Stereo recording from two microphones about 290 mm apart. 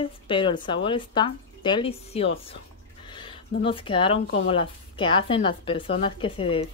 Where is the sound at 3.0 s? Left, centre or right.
Centre.